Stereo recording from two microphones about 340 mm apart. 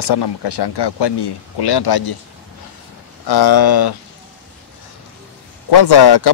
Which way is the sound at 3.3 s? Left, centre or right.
Left.